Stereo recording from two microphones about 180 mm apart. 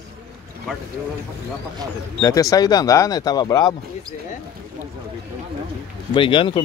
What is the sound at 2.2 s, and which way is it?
Speech, 20° left (ahead or behind).